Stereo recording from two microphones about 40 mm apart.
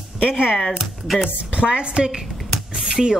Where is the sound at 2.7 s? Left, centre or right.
Centre.